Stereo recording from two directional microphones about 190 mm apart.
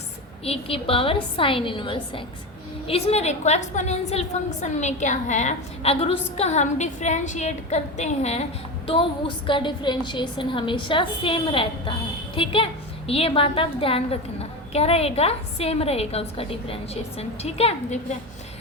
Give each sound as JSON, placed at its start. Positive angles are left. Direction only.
{"t": 0.4, "sound": "a woman's voice", "side_deg": 30}